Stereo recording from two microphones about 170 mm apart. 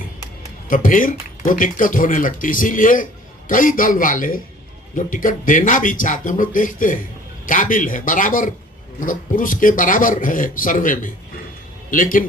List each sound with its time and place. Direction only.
0.7 s speech: 50° left (ahead or behind)